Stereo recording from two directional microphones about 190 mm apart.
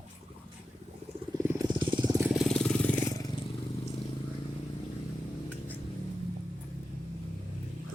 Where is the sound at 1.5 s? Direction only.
20° right (ahead or behind).